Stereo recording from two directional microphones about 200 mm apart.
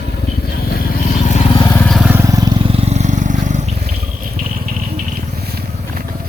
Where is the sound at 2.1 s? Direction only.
15° right (ahead or behind); by 3.9 s 35° right (ahead or behind).